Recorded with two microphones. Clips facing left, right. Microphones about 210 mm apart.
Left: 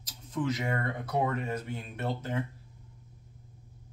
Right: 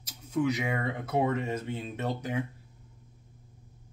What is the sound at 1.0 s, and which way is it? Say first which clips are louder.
Speech: right 3 dB; 25° right (ahead or behind).